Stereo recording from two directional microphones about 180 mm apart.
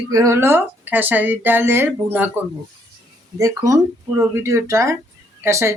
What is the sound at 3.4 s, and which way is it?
Speech, 20° right (ahead or behind).